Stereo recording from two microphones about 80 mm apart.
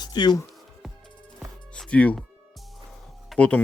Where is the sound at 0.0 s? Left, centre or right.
Left.